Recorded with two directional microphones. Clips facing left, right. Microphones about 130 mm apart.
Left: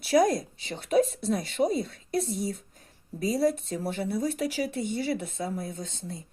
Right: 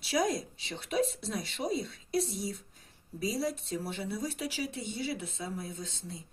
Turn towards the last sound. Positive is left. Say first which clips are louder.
# left 4 dB
turn(degrees=55)  # may be behind; listen again after turning